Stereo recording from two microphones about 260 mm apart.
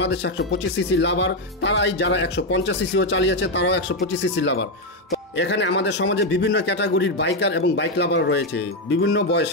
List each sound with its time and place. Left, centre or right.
0.0 s speech: left